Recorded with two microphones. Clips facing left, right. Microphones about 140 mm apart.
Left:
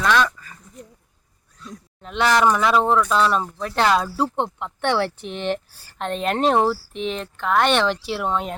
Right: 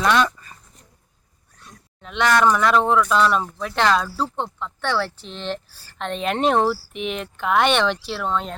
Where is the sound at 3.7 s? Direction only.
10° left (ahead or behind).